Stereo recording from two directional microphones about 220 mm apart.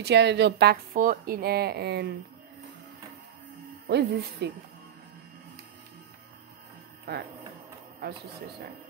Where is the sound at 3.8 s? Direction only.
45° right (ahead or behind).